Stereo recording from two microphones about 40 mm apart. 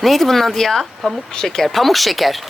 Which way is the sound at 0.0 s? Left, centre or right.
Centre.